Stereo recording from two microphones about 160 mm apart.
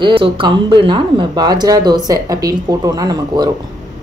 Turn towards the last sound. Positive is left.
turn(degrees=-25)  # may be behind; listen again after turning